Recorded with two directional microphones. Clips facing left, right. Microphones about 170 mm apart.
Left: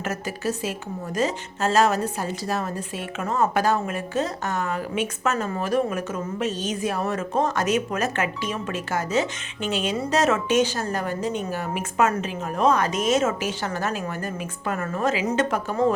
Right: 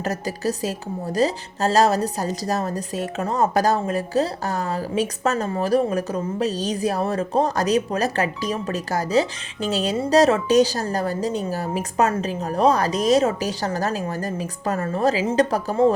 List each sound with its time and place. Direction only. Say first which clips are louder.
0.0 s a woman's voice: right 3 dB; 35° right (ahead or behind)